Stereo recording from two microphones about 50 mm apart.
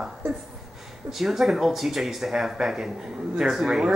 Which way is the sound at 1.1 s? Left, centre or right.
Centre.